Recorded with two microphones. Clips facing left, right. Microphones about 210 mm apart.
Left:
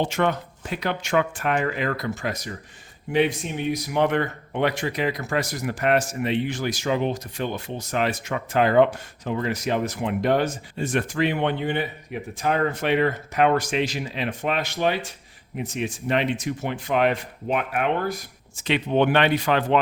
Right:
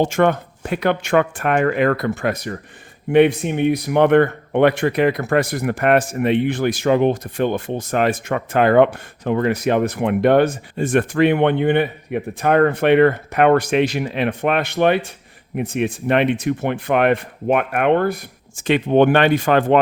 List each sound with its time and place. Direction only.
0.0 s speech: 50° right (ahead or behind)